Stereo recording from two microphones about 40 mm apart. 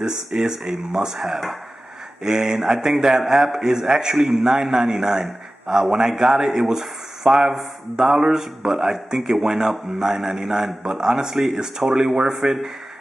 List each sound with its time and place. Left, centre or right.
0.0 s a man's voice: centre